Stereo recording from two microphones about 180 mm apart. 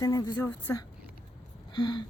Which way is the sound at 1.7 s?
25° left (ahead or behind).